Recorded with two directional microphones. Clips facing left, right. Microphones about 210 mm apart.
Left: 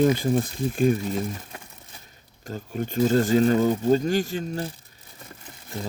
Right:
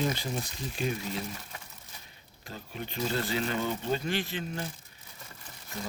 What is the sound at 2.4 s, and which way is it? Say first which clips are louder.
Speech: left 10 dB; 45° left (ahead or behind).